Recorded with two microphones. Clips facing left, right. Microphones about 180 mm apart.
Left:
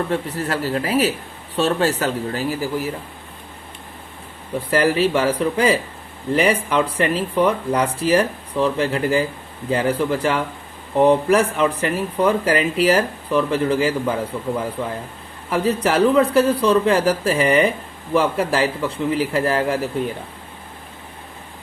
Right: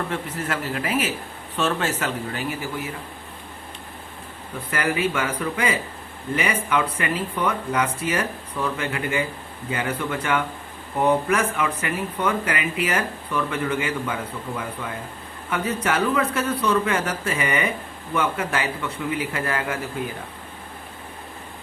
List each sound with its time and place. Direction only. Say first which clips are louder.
0.1 s speech: left 5 dB; 35° left (ahead or behind)
4.7 s speech: left 7 dB; 35° left (ahead or behind)